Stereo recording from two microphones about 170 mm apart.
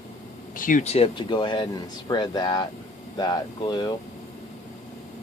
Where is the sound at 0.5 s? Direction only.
55° left (ahead or behind); by 3.9 s 25° left (ahead or behind).